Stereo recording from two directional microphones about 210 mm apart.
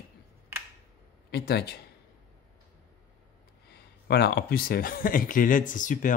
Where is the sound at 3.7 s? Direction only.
50° left (ahead or behind).